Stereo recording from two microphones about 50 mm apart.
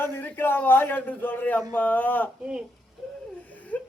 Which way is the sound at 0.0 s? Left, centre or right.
Left.